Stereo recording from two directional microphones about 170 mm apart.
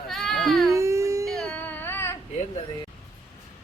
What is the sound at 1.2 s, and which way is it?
Music, 5° left (ahead or behind).